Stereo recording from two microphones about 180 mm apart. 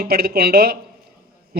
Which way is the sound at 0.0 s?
60° right (ahead or behind).